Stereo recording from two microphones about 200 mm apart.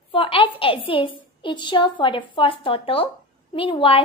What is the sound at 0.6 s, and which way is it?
A woman's voice, 25° left (ahead or behind).